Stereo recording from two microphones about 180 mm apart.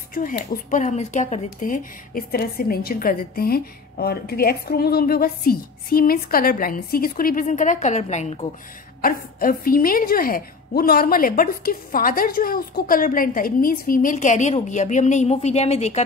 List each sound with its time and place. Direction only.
0.1 s speech: 50° left (ahead or behind)
9.0 s speech: 50° left (ahead or behind)